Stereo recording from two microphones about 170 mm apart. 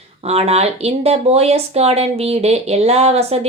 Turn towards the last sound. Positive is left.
turn(degrees=-35)  # may be behind; listen again after turning